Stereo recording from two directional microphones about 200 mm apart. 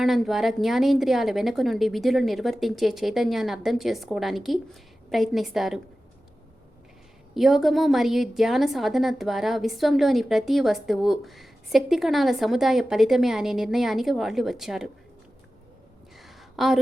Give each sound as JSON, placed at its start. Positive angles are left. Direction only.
{"t": 0.0, "sound": "a woman's voice", "side_deg": 0}
{"t": 7.3, "sound": "a woman's voice", "side_deg": 0}
{"t": 16.1, "sound": "a sound", "side_deg": 0}